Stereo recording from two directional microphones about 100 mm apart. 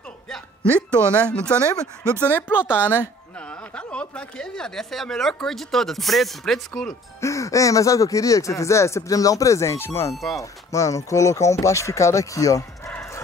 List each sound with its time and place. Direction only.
1.1 s a woman's voice: 10° left (ahead or behind)
7.2 s speech: 30° left (ahead or behind)
10.1 s speech: centre (ahead or behind)
10.7 s speech: 30° left (ahead or behind)